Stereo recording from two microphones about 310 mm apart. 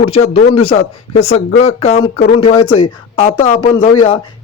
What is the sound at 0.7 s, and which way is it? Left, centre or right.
A man's voice, left.